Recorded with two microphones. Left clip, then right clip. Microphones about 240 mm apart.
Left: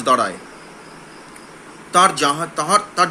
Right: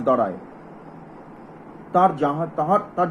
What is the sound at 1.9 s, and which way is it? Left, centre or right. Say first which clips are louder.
Speech: left 4 dB; left.